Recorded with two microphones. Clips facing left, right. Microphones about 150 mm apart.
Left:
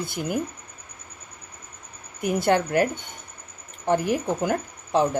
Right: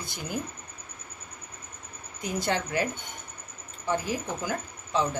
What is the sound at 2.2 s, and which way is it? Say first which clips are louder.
Speech: left 8 dB; 60° left (ahead or behind).